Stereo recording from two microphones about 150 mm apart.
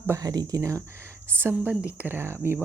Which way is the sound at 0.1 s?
25° right (ahead or behind).